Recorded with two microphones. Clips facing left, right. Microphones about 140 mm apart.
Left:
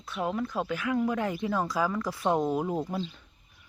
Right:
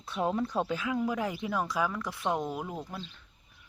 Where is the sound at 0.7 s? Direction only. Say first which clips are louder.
Left 3 dB; 15° right (ahead or behind); by 2.4 s 5° left (ahead or behind).